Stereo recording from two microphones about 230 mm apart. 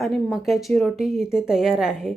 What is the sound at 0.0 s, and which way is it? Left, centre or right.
Speech, centre.